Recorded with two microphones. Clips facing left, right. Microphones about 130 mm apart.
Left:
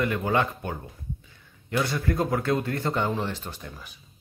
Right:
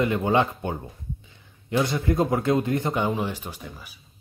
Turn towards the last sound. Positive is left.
turn(degrees=-5)  # may be behind; listen again after turning